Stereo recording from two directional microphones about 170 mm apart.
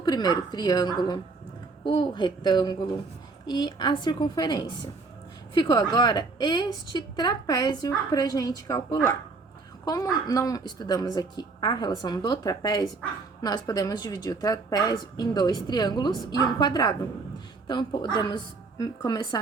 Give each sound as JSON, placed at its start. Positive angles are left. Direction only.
{"t": 0.0, "sound": "a woman's voice", "side_deg": 25}